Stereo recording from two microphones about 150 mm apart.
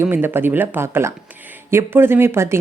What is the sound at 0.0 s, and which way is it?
Speech, 15° right (ahead or behind).